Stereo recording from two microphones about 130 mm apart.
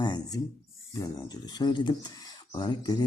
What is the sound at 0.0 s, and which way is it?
Speech, 30° left (ahead or behind).